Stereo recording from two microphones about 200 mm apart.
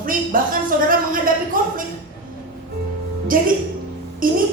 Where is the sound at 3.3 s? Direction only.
45° right (ahead or behind).